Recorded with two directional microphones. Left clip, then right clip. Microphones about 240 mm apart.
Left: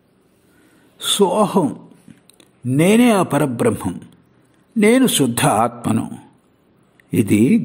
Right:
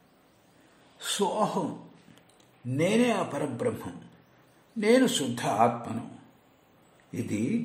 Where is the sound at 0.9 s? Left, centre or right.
Left.